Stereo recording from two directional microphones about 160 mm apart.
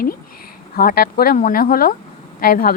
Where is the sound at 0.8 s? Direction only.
65° left (ahead or behind).